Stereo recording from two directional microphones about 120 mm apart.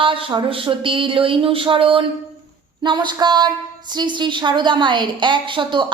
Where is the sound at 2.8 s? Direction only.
35° right (ahead or behind).